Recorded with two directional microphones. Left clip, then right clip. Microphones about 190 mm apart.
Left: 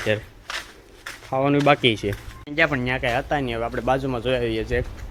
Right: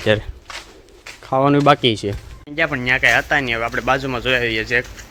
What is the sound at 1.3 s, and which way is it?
Speech, 30° right (ahead or behind).